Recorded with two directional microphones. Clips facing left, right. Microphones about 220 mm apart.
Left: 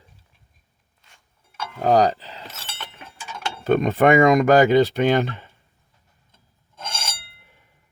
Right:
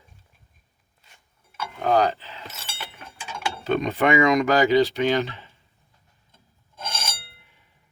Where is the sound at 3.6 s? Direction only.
50° left (ahead or behind).